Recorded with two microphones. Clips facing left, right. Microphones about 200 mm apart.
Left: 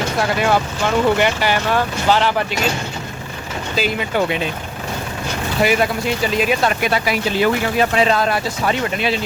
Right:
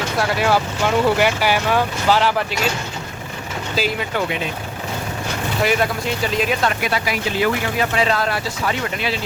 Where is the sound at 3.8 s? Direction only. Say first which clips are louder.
Left 1 dB; centre (ahead or behind).